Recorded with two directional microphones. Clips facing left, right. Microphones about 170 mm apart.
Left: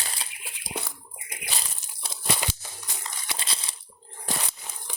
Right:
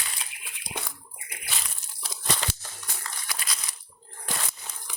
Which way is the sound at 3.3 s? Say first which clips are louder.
Left 2 dB; 25° left (ahead or behind).